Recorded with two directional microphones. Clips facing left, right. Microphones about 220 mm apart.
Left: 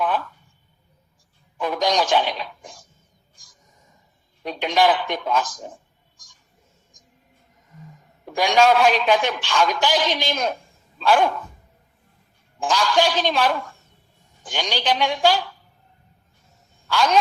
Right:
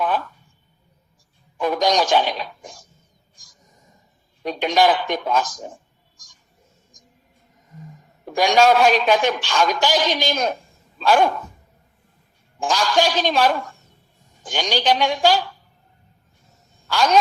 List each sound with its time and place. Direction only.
1.6 s a woman's voice: 40° right (ahead or behind)
4.4 s a woman's voice: 40° right (ahead or behind)
8.4 s a woman's voice: 40° right (ahead or behind)
12.5 s a woman's voice: 40° right (ahead or behind)
16.9 s a woman's voice: 40° right (ahead or behind)